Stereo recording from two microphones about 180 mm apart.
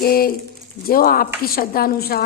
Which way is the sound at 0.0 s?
55° left (ahead or behind).